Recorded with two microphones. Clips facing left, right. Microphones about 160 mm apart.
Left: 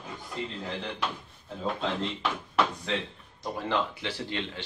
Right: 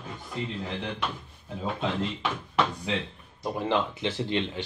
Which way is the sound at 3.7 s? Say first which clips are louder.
Right 2 dB; 20° right (ahead or behind).